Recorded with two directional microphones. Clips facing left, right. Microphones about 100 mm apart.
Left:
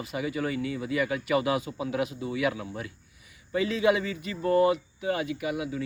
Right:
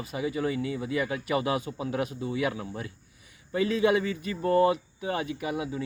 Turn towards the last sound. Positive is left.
turn(degrees=-35)  # may be behind; listen again after turning